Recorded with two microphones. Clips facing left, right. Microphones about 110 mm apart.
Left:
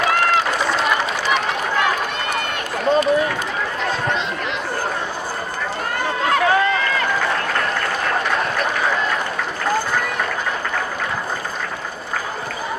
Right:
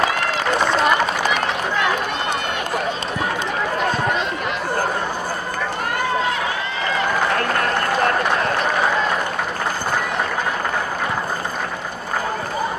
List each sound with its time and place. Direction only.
6.2 s run: 60° left (ahead or behind)